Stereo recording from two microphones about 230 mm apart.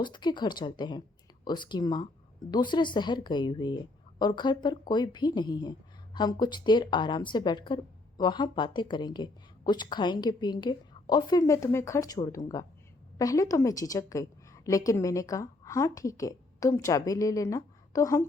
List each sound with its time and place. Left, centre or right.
0.0 s a woman's voice: centre